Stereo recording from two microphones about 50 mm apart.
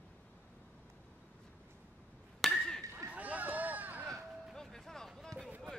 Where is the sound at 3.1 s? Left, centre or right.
Right.